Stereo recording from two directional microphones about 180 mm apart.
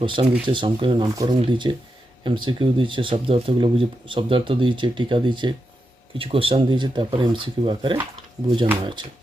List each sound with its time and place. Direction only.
0.0 s speech: 25° right (ahead or behind)